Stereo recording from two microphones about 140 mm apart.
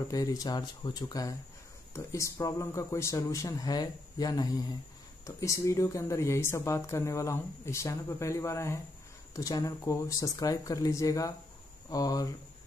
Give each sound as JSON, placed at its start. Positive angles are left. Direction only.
{"t": 0.1, "sound": "speech", "side_deg": 25}